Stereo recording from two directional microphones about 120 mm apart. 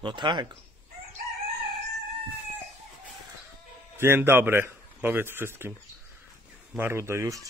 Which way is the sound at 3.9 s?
20° right (ahead or behind).